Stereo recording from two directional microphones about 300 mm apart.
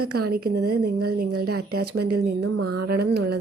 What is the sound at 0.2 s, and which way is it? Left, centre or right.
Speech, right.